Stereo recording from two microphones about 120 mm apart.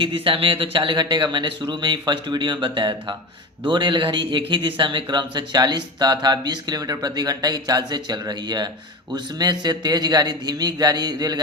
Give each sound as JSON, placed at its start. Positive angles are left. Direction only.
{"t": 0.0, "sound": "a man's voice", "side_deg": -45}